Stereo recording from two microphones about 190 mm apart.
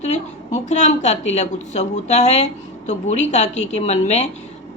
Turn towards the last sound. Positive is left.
turn(degrees=35)  # may be behind; listen again after turning